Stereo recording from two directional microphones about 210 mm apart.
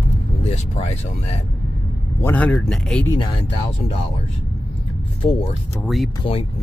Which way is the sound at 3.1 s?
25° left (ahead or behind).